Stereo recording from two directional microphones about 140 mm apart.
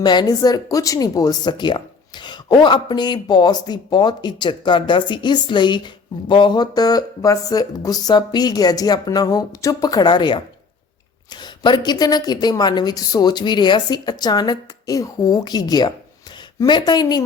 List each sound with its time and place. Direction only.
0.0 s a woman's voice: 30° left (ahead or behind)